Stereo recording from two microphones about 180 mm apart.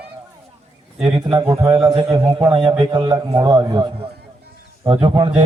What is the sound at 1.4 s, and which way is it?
A man's voice, 15° right (ahead or behind).